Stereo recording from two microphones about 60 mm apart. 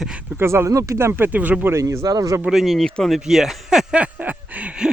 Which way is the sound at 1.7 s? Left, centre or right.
Right.